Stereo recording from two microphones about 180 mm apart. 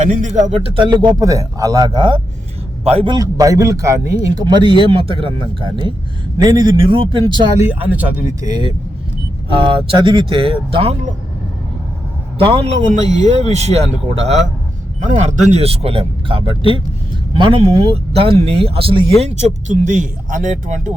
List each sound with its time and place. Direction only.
0.0 s speech: 45° right (ahead or behind)
3.2 s speech: 20° right (ahead or behind)
7.6 s speech: 10° right (ahead or behind)
8.4 s speech: 25° right (ahead or behind)
12.4 s speech: 30° right (ahead or behind)
15.0 s speech: 40° right (ahead or behind)